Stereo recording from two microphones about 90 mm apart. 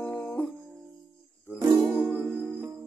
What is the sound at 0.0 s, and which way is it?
Music, 15° left (ahead or behind).